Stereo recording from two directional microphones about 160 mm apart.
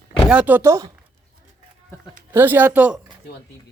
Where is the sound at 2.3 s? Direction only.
10° right (ahead or behind).